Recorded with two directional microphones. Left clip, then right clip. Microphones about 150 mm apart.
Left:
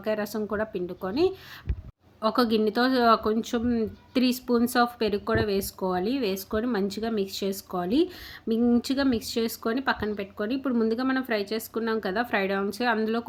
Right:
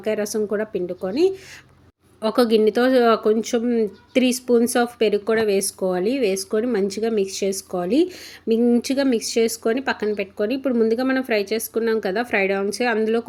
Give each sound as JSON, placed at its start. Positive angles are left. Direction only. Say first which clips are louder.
{"t": 0.0, "sound": "speech", "louder": "right 6 dB", "side_deg": -10}